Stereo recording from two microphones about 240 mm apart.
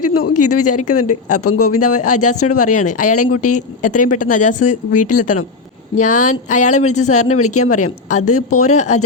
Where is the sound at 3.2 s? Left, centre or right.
Left.